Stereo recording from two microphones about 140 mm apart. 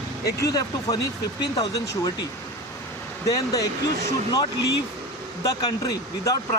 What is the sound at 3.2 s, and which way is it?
Speech, 25° left (ahead or behind).